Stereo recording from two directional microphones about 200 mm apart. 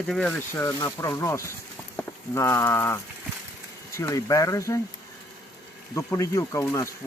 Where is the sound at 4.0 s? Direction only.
15° left (ahead or behind).